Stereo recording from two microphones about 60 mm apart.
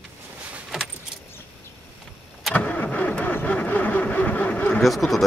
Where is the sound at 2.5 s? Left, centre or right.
Left.